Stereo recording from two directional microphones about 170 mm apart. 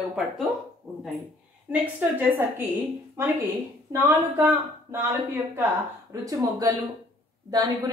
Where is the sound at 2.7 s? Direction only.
15° right (ahead or behind).